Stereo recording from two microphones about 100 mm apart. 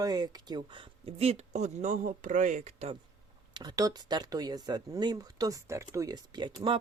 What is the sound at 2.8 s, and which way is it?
Mantra, 90° right.